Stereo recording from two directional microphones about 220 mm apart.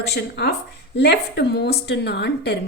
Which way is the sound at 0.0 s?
50° left (ahead or behind).